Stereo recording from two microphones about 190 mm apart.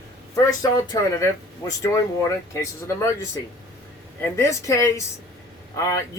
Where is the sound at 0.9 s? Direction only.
20° left (ahead or behind).